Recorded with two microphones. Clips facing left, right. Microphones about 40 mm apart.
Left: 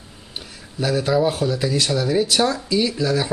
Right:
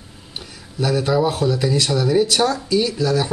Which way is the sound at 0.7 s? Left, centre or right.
Centre.